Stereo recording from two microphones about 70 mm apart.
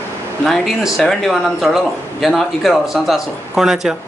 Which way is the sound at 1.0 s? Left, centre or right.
Centre.